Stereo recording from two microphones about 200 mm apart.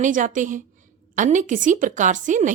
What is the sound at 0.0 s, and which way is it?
A woman's voice, 40° right (ahead or behind).